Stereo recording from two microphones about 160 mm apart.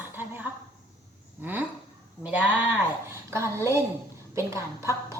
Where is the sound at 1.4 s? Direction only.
10° right (ahead or behind).